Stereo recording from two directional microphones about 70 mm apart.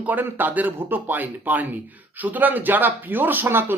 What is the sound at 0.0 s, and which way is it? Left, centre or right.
Speech, right.